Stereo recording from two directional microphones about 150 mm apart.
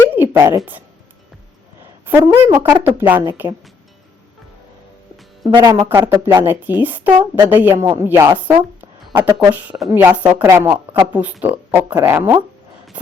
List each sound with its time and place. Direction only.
0.2 s a woman's voice: 15° right (ahead or behind)
2.0 s a woman's voice: 15° right (ahead or behind)
5.5 s a woman's voice: 30° right (ahead or behind)
9.6 s speech: centre (ahead or behind)
9.9 s a woman's voice: 15° right (ahead or behind)
11.1 s a woman's voice: 10° right (ahead or behind)